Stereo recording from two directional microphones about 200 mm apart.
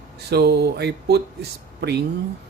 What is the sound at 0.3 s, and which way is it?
Speech, 55° right (ahead or behind).